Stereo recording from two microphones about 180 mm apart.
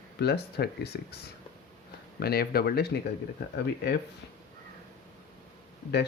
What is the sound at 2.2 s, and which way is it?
Speech, 60° left (ahead or behind).